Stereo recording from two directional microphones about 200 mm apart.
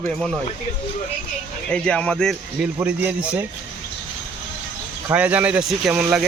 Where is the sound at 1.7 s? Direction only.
5° left (ahead or behind).